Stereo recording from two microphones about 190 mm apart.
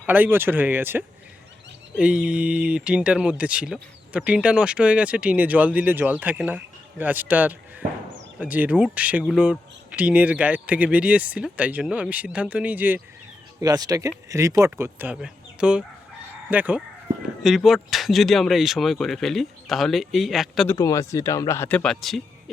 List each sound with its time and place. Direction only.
0.0 s speech: 10° right (ahead or behind)
13.6 s speech: 20° right (ahead or behind); by 20.7 s centre (ahead or behind)
20.7 s speech: 15° left (ahead or behind); by 22.5 s centre (ahead or behind)